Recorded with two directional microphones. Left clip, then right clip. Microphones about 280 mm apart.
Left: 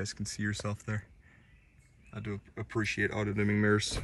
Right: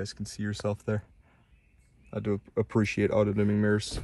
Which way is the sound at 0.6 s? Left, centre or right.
Centre.